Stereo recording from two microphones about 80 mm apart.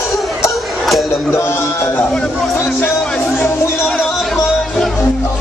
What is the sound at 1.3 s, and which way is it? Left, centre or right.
Speech, left.